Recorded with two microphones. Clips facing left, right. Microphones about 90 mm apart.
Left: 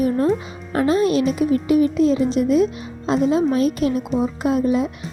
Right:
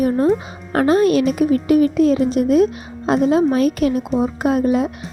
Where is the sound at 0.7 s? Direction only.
55° right (ahead or behind).